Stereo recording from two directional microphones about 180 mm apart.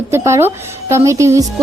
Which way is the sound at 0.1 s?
15° right (ahead or behind).